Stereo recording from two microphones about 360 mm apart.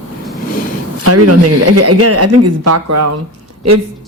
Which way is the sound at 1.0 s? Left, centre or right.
Right.